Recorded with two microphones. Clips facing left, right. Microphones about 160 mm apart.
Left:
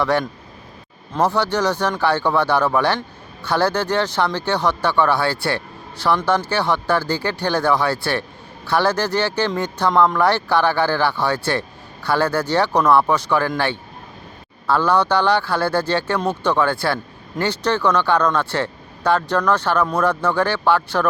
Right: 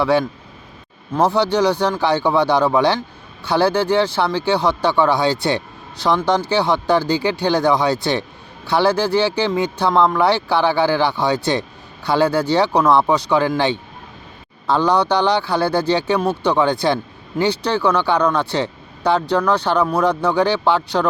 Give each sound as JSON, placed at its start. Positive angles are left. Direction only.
{"t": 0.0, "sound": "speech", "side_deg": -10}